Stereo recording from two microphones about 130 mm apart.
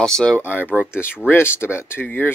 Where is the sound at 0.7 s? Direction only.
10° right (ahead or behind).